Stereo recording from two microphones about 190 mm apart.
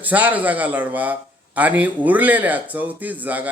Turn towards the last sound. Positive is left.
turn(degrees=-10)  # may be behind; listen again after turning